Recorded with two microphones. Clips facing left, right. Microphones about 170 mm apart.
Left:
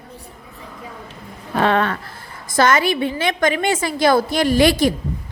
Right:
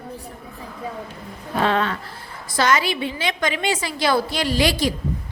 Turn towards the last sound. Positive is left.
turn(degrees=55)  # may be behind; listen again after turning